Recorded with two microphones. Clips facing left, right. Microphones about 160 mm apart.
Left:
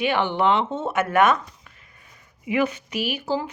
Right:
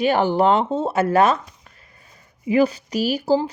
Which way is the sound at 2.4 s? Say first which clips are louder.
Right 5 dB; 35° right (ahead or behind).